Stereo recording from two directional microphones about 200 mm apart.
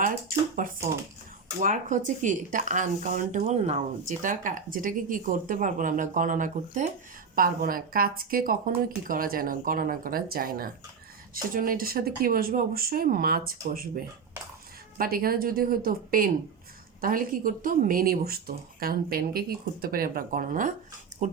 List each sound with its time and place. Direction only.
0.0 s a woman's voice: 45° right (ahead or behind)